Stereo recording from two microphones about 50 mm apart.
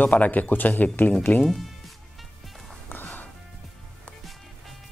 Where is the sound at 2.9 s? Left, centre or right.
Left.